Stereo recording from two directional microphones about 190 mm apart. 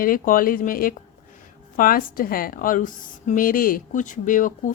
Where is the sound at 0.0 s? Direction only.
50° left (ahead or behind).